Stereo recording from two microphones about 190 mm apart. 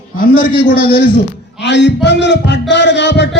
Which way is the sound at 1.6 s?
65° left (ahead or behind).